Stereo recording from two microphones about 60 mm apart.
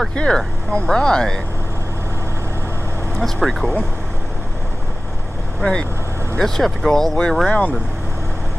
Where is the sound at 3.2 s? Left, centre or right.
Centre.